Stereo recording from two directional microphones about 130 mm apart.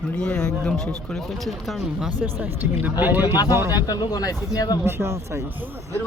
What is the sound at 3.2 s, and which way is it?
Speech, 30° left (ahead or behind).